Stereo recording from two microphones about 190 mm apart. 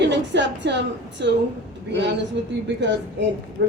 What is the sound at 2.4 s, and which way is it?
Speech, 65° right (ahead or behind).